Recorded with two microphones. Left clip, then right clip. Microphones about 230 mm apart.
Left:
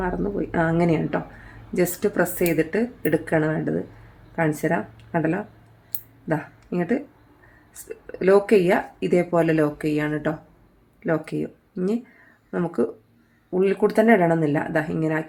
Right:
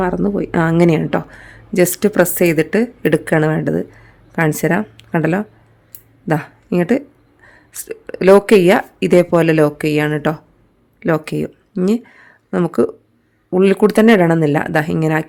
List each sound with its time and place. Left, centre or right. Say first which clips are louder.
0.0 s speech: right 8 dB; right